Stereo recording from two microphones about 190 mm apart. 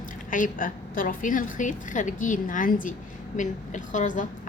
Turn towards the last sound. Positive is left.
turn(degrees=40)  # may be behind; listen again after turning